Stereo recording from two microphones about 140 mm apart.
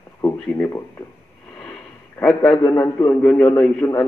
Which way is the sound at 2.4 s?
30° left (ahead or behind).